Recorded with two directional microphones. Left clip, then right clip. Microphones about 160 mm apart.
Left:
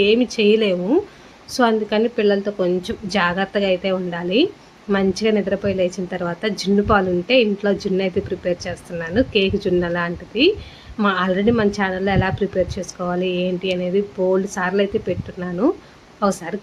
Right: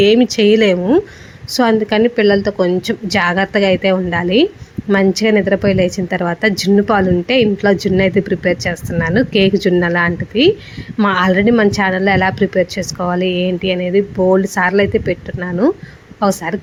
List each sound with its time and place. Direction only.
0.0 s speech: 45° right (ahead or behind)